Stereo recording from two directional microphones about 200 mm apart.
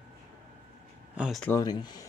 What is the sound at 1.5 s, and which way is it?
Speech, 20° left (ahead or behind).